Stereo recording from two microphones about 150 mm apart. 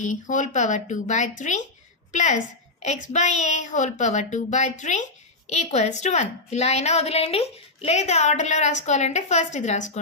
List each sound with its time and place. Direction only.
0.0 s a woman's voice: 55° left (ahead or behind)